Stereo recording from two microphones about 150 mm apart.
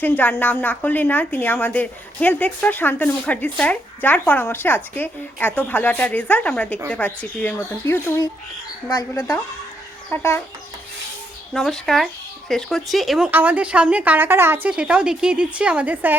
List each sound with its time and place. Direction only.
0.0 s a woman's voice: 10° left (ahead or behind)
10.1 s a woman's voice: 15° left (ahead or behind)
11.5 s a woman's voice: centre (ahead or behind)